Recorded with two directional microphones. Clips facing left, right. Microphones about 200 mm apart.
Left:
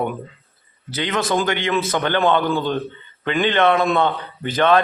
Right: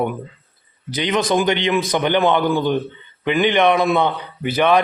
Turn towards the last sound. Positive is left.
turn(degrees=-10)  # may be behind; listen again after turning